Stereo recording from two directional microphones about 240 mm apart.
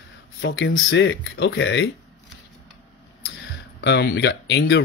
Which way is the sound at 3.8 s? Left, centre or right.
Left.